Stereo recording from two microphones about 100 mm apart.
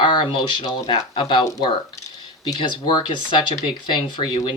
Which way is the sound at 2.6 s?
55° left (ahead or behind).